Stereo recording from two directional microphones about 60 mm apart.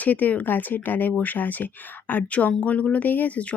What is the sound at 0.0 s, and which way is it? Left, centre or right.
Speech, left.